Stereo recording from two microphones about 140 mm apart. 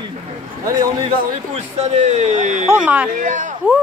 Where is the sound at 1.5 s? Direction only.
55° right (ahead or behind).